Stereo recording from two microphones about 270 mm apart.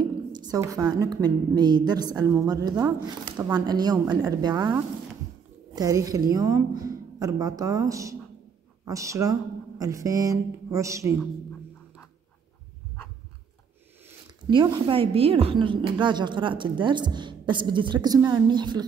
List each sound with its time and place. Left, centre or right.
0.3 s a woman's voice: centre
14.5 s a woman's voice: centre